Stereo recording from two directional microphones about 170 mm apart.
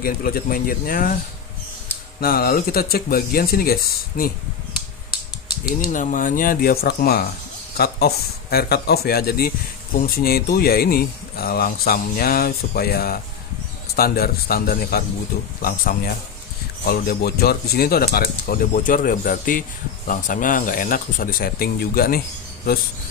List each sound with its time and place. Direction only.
0.0 s speech: 60° left (ahead or behind)
2.1 s speech: 60° left (ahead or behind)
5.7 s speech: 55° left (ahead or behind)